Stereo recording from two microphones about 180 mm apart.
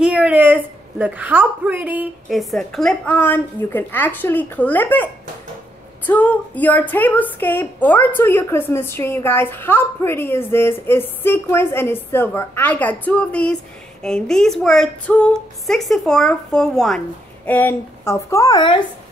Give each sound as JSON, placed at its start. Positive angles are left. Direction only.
{"t": 0.0, "sound": "a woman's voice", "side_deg": -5}